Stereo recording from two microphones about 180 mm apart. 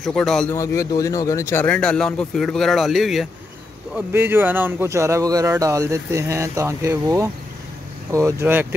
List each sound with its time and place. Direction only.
0.0 s speech: centre (ahead or behind)
0.6 s speech: 15° left (ahead or behind); by 3.3 s centre (ahead or behind)
3.9 s speech: 10° right (ahead or behind)